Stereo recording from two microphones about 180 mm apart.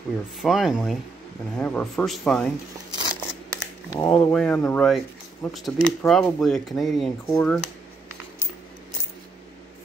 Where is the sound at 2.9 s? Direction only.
25° right (ahead or behind).